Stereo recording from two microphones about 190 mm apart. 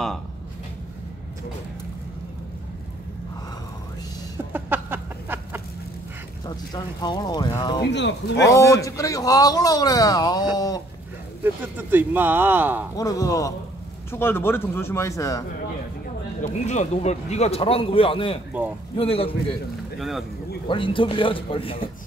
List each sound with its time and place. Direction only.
4.5 s a sound: 10° right (ahead or behind)
6.4 s speech: 20° left (ahead or behind)
7.8 s speech: 65° left (ahead or behind)
8.5 s speech: 15° left (ahead or behind)
11.4 s speech: 10° right (ahead or behind)
12.9 s speech: 20° left (ahead or behind)
16.3 s speech: 35° left (ahead or behind)
20.0 s speech: centre (ahead or behind)
20.6 s speech: 25° left (ahead or behind)